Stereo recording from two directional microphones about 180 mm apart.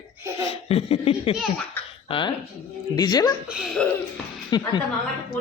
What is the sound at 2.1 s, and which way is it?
Speech, 25° left (ahead or behind).